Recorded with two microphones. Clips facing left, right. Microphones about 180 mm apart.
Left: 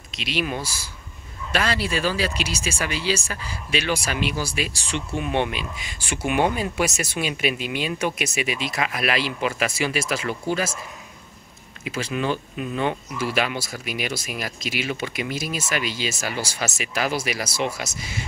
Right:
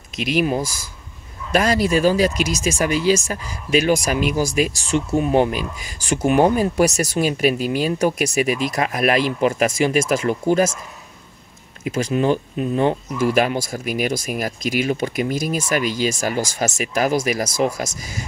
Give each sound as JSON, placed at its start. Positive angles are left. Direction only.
{"t": 0.1, "sound": "speech", "side_deg": -45}
{"t": 11.8, "sound": "speech", "side_deg": -45}